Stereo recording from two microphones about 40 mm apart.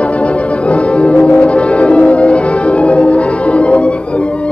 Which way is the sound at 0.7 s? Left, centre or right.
Left.